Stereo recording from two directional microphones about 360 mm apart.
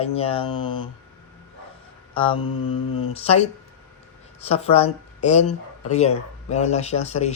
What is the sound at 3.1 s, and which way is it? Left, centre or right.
Speech, centre.